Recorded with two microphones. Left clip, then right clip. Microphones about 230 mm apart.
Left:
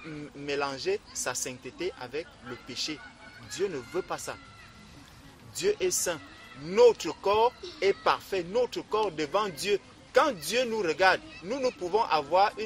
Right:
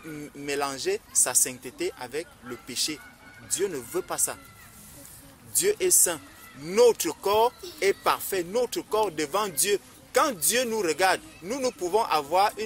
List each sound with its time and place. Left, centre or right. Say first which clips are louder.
0.5 s speech: right 2 dB; right
5.5 s speech: right 3 dB; right